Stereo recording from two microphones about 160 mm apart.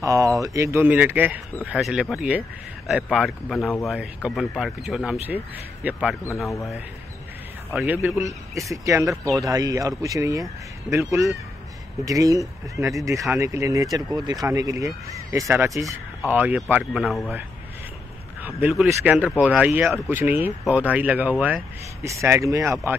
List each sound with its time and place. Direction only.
0.0 s speech: 20° right (ahead or behind); by 6.1 s 5° right (ahead or behind)
7.7 s speech: 10° right (ahead or behind)
18.7 s speech: 5° right (ahead or behind)